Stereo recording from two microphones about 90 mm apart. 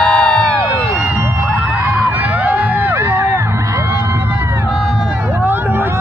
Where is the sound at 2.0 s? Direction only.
20° right (ahead or behind).